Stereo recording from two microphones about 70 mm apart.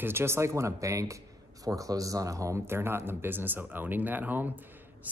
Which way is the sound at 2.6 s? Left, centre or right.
Right.